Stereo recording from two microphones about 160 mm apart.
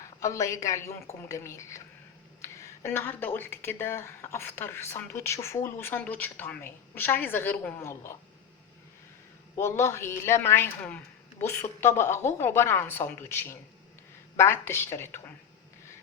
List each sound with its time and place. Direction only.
0.0 s speech: 20° left (ahead or behind)
9.6 s speech: 15° left (ahead or behind)